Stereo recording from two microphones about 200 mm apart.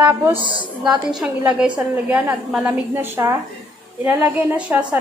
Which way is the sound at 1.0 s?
Centre (ahead or behind).